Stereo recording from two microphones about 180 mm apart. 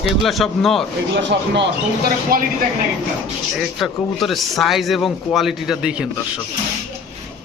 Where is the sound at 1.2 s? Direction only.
75° right (ahead or behind).